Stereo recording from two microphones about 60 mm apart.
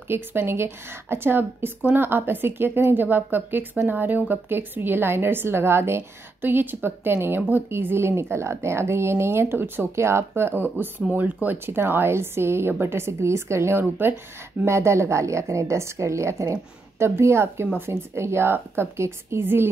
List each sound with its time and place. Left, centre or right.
0.1 s a woman's voice: right
11.4 s a woman's voice: right
14.6 s speech: right